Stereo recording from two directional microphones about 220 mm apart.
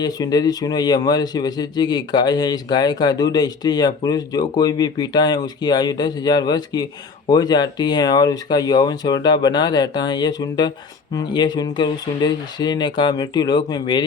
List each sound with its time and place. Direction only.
0.0 s speech: 20° left (ahead or behind)